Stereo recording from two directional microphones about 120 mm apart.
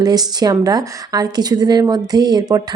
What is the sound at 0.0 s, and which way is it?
A woman's voice, 35° right (ahead or behind).